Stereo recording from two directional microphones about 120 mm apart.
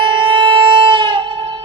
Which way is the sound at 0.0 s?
40° right (ahead or behind).